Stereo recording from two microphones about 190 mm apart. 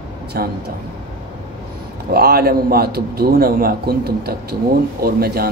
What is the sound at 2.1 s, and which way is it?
A man's voice, 55° right (ahead or behind).